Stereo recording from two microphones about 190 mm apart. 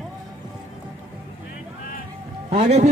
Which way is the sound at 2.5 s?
35° right (ahead or behind).